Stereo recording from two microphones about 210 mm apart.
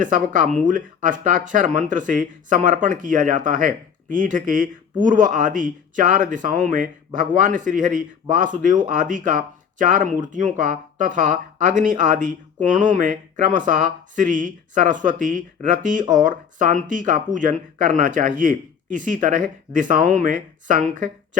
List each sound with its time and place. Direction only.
0.0 s a man's voice: 35° right (ahead or behind)